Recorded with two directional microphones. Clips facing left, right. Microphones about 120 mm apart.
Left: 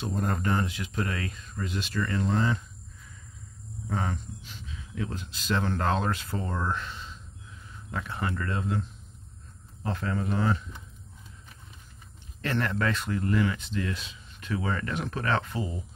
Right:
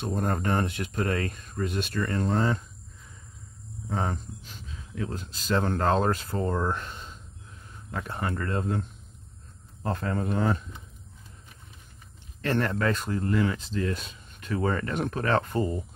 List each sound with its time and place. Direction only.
0.0 s speech: 55° right (ahead or behind)
4.0 s speech: 40° right (ahead or behind)
9.9 s speech: 45° right (ahead or behind)
12.5 s speech: 40° right (ahead or behind)